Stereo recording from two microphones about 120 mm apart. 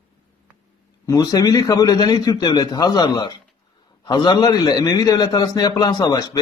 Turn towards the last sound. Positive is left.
turn(degrees=30)  # may be behind; listen again after turning